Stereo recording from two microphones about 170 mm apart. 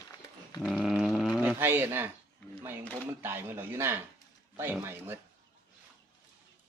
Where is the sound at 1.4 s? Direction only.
10° right (ahead or behind).